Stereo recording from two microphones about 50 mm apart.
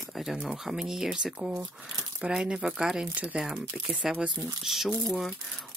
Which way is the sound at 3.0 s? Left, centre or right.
Right.